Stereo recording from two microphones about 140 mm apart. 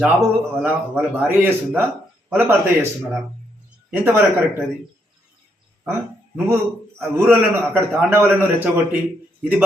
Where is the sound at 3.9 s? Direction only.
15° right (ahead or behind).